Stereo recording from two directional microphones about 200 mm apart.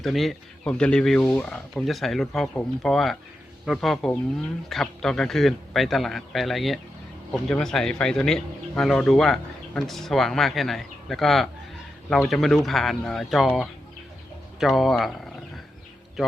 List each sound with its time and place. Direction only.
0.0 s speech: centre (ahead or behind)